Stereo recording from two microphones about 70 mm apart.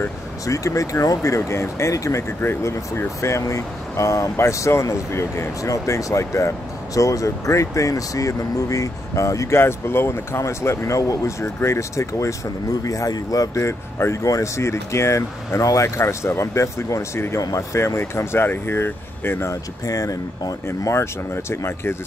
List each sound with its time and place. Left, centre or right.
0.5 s speech: left
9.6 s speech: left
13.6 s speech: left
17.4 s speech: left
17.7 s speech: left
19.9 s speech: left
20.6 s speech: left